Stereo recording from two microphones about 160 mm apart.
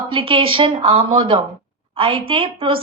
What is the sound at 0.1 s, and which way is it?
A woman's voice, 35° right (ahead or behind).